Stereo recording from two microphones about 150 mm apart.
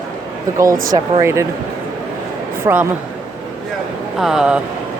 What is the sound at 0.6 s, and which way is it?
Speech, 20° right (ahead or behind).